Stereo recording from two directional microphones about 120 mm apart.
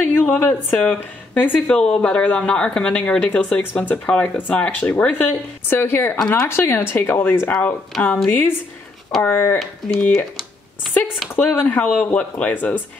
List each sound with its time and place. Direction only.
0.0 s speech: 15° left (ahead or behind)
6.1 s speech: 5° left (ahead or behind)
6.4 s speech: 20° left (ahead or behind)
11.3 s speech: 15° left (ahead or behind)